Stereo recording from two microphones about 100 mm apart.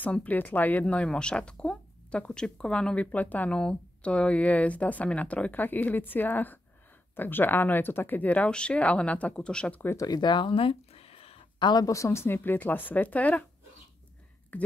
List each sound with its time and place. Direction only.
0.0 s speech: 15° left (ahead or behind)
9.8 s speech: 25° left (ahead or behind)
10.0 s speech: 45° left (ahead or behind); by 11.3 s 80° left
11.6 s speech: 45° left (ahead or behind)
11.9 s speech: 30° left (ahead or behind)
14.5 s a sound: 15° left (ahead or behind)